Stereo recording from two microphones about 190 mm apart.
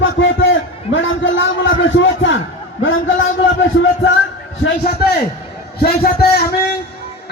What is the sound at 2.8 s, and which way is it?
Music, 90° left.